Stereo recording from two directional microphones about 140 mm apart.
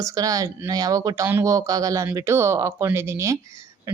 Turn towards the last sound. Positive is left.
turn(degrees=-20)  # may be behind; listen again after turning